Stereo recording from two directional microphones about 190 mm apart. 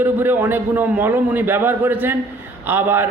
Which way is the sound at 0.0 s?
10° right (ahead or behind).